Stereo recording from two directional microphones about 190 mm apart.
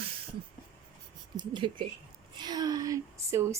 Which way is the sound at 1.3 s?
25° right (ahead or behind).